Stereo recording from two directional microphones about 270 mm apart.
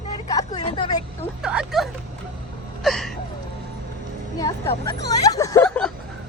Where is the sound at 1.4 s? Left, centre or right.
Centre.